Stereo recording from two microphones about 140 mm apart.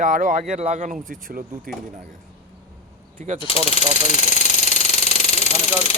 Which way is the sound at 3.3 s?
40° left (ahead or behind).